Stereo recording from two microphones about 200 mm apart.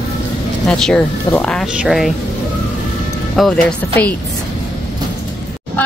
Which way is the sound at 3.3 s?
Centre (ahead or behind).